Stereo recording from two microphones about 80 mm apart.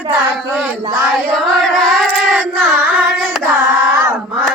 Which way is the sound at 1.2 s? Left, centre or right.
Centre.